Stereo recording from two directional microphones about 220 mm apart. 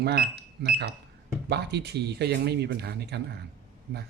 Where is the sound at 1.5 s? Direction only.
50° right (ahead or behind).